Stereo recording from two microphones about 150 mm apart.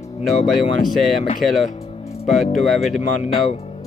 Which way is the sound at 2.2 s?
Centre (ahead or behind).